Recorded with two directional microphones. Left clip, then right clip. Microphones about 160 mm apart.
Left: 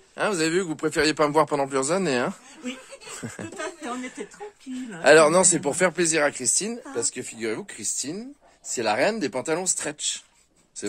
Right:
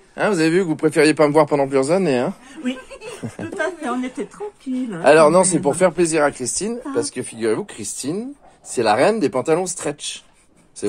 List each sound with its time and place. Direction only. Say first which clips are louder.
0.1 s speech: right 6 dB; 20° left (ahead or behind)
3.2 s speech: right 4 dB; 40° left (ahead or behind)
3.5 s a woman's voice: right 11 dB; centre (ahead or behind)
5.0 s speech: right 4 dB; 35° left (ahead or behind)
7.0 s speech: right 6 dB; 20° left (ahead or behind)